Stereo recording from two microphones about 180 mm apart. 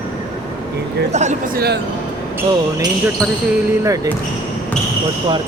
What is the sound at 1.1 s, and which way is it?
Speech, 40° right (ahead or behind).